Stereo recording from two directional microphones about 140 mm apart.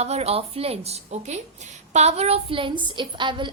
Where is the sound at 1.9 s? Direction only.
50° right (ahead or behind); by 3.5 s 35° right (ahead or behind).